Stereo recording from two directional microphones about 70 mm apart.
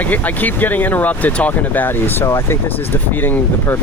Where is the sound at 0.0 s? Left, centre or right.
Left.